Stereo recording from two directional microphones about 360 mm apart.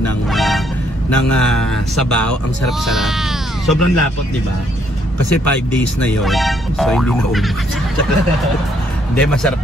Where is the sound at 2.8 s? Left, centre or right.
Centre.